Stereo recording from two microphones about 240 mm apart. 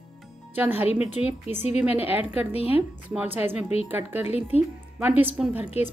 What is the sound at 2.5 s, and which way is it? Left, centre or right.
Speech, left.